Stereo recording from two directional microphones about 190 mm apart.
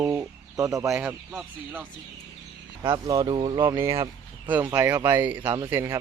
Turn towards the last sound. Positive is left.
turn(degrees=-10)  # may be behind; listen again after turning